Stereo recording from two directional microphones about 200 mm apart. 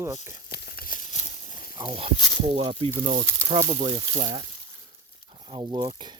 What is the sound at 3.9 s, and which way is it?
Speech, 25° right (ahead or behind).